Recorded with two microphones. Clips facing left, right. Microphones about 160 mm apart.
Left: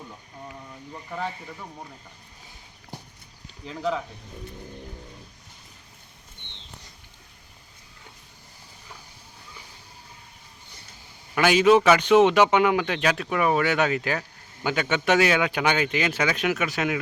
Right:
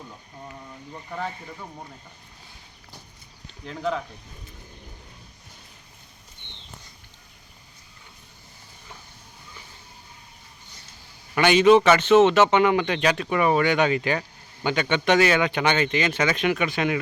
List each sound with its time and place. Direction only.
3.7 s a man's voice: 5° left (ahead or behind)
11.3 s a man's voice: 5° left (ahead or behind)